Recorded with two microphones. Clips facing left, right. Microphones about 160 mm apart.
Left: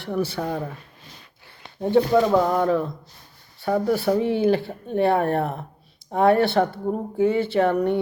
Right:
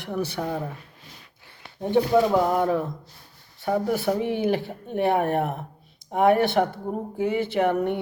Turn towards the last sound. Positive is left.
turn(degrees=-20)  # may be behind; listen again after turning